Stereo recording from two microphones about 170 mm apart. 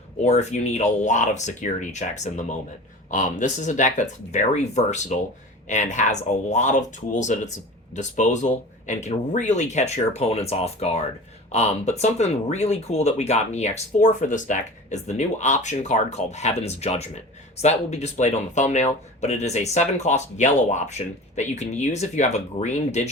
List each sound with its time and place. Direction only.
0.2 s speech: 40° left (ahead or behind)